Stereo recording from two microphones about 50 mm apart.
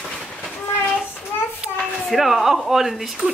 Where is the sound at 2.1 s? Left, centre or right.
Centre.